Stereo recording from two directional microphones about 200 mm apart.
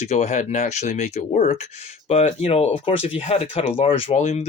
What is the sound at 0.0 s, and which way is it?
Speech, 35° left (ahead or behind).